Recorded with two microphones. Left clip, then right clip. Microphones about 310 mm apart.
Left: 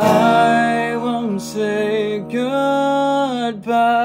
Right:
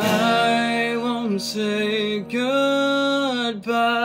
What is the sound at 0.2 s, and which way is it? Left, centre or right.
Music, centre.